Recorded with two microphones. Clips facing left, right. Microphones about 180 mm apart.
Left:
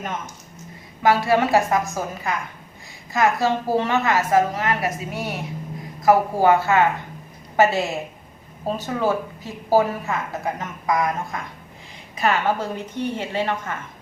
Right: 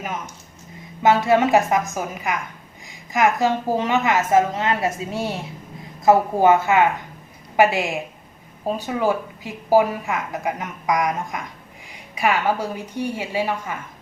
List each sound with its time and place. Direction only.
1.0 s a woman's voice: 20° right (ahead or behind)